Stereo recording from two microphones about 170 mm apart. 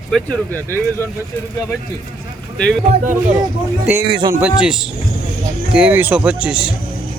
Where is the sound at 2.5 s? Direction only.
5° left (ahead or behind).